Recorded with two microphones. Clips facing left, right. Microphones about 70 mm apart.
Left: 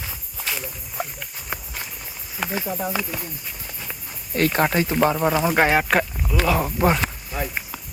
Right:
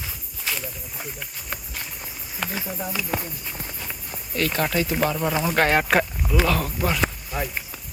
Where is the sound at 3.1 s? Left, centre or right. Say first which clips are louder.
Right 5 dB; right.